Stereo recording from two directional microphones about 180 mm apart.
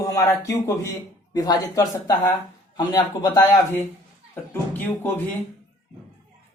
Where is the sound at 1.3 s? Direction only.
20° left (ahead or behind).